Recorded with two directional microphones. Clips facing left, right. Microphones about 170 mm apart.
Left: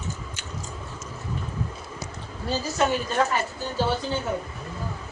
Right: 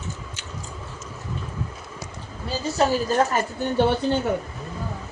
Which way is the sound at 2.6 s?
35° right (ahead or behind).